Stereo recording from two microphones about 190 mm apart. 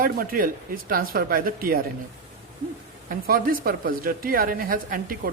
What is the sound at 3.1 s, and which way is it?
Speech, 50° right (ahead or behind).